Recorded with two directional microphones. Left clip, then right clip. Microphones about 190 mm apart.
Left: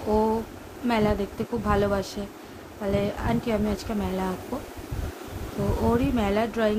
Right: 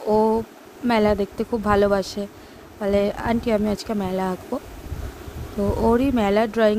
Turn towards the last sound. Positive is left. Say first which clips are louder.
# right 6 dB
turn(degrees=-45)  # may be behind; listen again after turning